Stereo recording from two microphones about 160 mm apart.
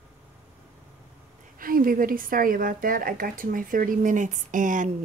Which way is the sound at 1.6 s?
60° right (ahead or behind).